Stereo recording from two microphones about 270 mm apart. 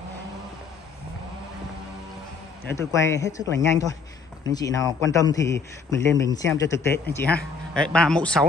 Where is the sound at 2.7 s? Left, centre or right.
Centre.